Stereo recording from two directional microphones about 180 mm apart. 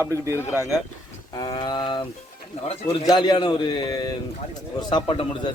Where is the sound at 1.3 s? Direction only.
20° left (ahead or behind).